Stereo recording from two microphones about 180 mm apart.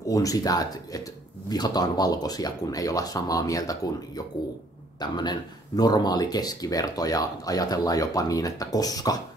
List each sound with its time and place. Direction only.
0.1 s speech: 20° left (ahead or behind)
5.0 s speech: 25° left (ahead or behind)